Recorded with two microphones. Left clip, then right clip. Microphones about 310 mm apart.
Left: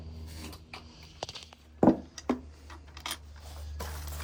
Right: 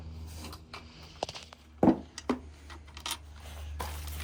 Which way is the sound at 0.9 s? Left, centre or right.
Centre.